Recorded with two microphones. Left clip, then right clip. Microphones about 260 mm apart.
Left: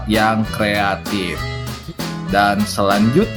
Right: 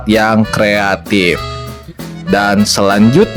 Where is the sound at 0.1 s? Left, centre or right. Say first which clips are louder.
Right 5 dB; right.